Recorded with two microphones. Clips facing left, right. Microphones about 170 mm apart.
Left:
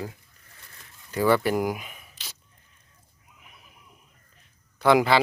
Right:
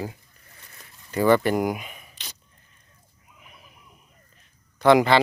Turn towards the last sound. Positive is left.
turn(degrees=5)  # may be behind; listen again after turning